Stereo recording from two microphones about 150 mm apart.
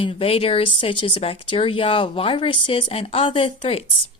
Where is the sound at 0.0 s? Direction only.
40° left (ahead or behind).